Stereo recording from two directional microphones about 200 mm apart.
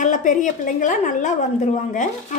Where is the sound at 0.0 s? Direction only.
40° left (ahead or behind).